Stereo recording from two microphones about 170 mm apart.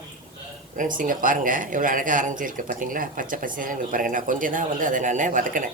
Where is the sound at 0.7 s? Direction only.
50° right (ahead or behind).